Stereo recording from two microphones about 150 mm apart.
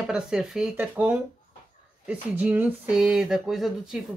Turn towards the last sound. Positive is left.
turn(degrees=0)  # may be behind; listen again after turning